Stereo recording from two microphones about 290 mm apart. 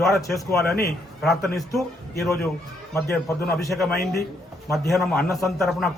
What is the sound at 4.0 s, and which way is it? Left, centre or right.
Speech, left.